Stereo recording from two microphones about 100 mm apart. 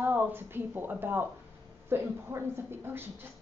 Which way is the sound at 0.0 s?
20° right (ahead or behind).